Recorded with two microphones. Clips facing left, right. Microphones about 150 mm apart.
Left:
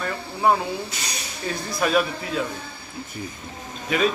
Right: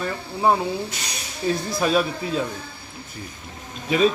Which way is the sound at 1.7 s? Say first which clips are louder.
Left 3 dB; 25° right (ahead or behind).